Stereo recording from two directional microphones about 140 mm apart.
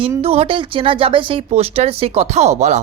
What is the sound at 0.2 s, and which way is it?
Speech, 45° right (ahead or behind).